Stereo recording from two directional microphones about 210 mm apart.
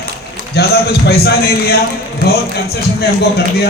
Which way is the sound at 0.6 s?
50° left (ahead or behind).